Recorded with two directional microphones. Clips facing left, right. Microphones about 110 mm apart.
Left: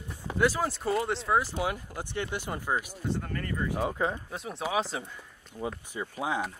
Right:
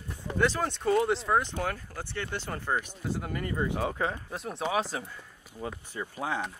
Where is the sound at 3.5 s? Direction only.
25° right (ahead or behind).